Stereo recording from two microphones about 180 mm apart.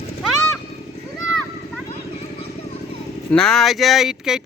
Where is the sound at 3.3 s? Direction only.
5° left (ahead or behind).